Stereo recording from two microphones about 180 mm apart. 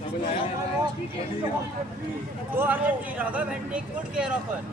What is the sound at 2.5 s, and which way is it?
Speech, 10° right (ahead or behind).